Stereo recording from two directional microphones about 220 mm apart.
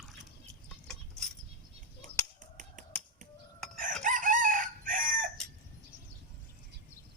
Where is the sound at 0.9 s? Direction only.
5° left (ahead or behind).